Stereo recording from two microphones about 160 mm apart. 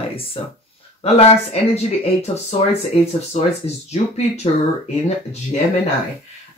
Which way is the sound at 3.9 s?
40° left (ahead or behind).